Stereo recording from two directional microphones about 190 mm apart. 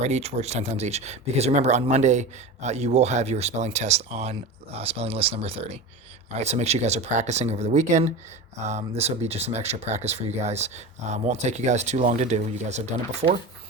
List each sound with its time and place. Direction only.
0.0 s speech: 35° right (ahead or behind)